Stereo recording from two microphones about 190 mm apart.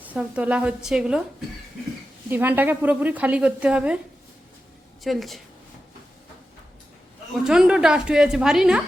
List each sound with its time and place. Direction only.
0.0 s a woman's voice: 10° right (ahead or behind)
2.3 s a woman's voice: 10° right (ahead or behind)
5.0 s a woman's voice: centre (ahead or behind)
7.3 s a woman's voice: centre (ahead or behind)